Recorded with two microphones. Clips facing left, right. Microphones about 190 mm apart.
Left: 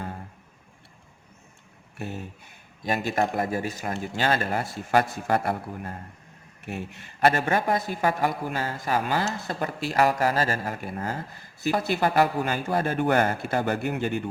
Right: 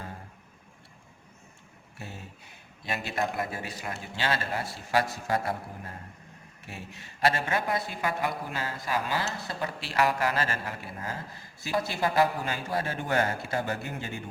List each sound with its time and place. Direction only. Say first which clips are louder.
2.8 s speech: left 6 dB; 45° left (ahead or behind)
6.7 s speech: left 9 dB; 55° left (ahead or behind)
11.9 s a man's voice: left 3 dB; 60° left (ahead or behind)